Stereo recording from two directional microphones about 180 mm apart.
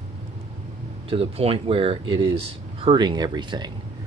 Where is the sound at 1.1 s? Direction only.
30° right (ahead or behind).